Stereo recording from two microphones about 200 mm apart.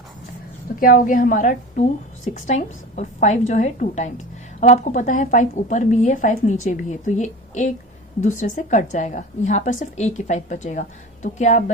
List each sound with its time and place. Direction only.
0.8 s a woman's voice: 45° left (ahead or behind)